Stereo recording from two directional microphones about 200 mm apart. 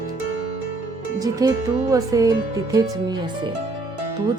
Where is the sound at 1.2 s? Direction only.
15° right (ahead or behind).